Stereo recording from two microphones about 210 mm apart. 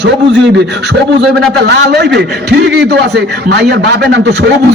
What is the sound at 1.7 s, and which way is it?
A man's voice, 50° right (ahead or behind).